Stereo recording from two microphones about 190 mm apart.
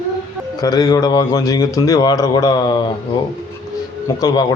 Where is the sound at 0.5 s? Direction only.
20° left (ahead or behind).